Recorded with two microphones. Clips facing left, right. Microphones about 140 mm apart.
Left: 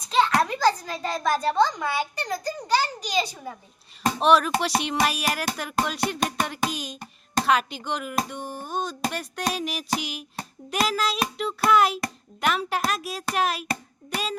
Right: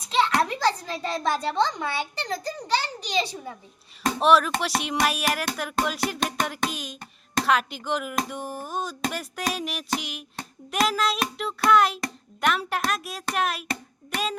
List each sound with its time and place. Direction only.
0.6 s a child's voice: 25° right (ahead or behind)
4.2 s speech: centre (ahead or behind)